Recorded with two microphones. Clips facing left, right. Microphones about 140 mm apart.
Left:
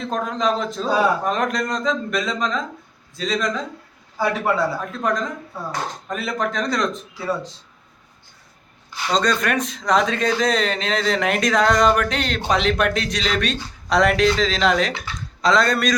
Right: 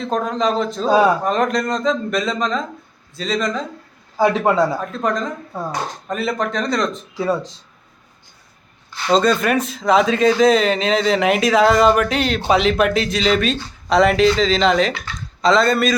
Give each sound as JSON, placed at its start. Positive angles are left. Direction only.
{"t": 0.0, "sound": "speech", "side_deg": 0}
{"t": 4.2, "sound": "speech", "side_deg": -20}
{"t": 5.0, "sound": "speech", "side_deg": 0}
{"t": 7.1, "sound": "speech", "side_deg": -20}
{"t": 9.1, "sound": "speech", "side_deg": -5}